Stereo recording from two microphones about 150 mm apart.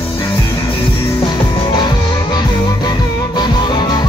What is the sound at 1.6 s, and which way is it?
Music, 30° left (ahead or behind).